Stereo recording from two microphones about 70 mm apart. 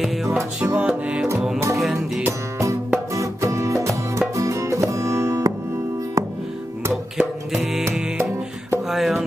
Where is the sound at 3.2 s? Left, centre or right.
Right.